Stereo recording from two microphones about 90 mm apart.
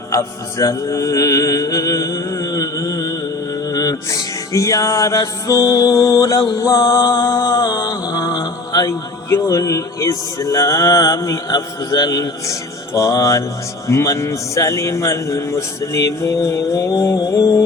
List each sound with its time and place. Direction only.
0.1 s music: 35° left (ahead or behind)
8.9 s speech: 35° left (ahead or behind)